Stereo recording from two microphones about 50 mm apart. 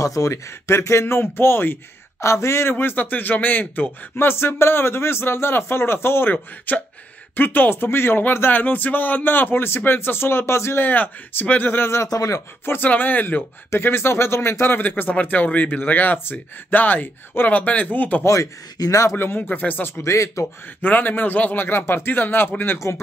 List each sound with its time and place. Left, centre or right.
0.0 s speech: left
2.1 s speech: left
2.7 s speech: left
6.3 s speech: left
10.8 s speech: left
12.6 s speech: left
13.7 s speech: left
18.2 s speech: left
19.1 s speech: left
20.0 s speech: left
20.8 s speech: left